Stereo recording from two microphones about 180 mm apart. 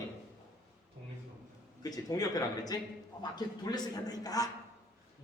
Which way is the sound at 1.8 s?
20° left (ahead or behind).